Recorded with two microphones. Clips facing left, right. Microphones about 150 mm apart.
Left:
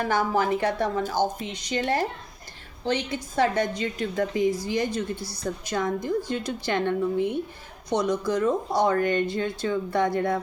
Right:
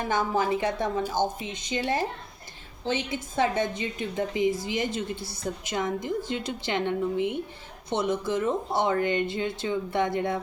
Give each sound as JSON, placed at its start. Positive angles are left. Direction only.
{"t": 0.0, "sound": "speech", "side_deg": -20}
{"t": 5.1, "sound": "a woman's voice", "side_deg": -50}
{"t": 5.4, "sound": "speech", "side_deg": -20}